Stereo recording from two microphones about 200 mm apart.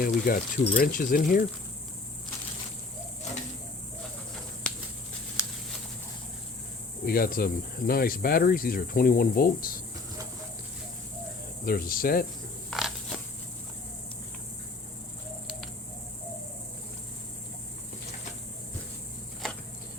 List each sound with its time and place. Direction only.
0.0 s speech: 45° left (ahead or behind)
7.0 s speech: 50° left (ahead or behind)
11.6 s speech: 45° left (ahead or behind)
12.7 s a sound: centre (ahead or behind)